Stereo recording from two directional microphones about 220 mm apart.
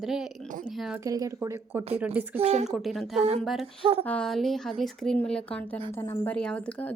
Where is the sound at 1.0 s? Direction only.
15° right (ahead or behind).